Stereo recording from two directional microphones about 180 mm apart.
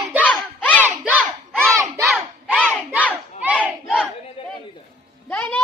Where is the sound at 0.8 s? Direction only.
10° right (ahead or behind).